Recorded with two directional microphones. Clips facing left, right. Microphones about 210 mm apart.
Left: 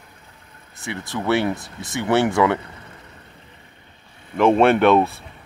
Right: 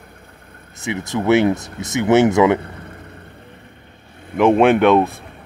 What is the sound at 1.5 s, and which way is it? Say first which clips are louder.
Speech: right 6 dB; 45° right (ahead or behind).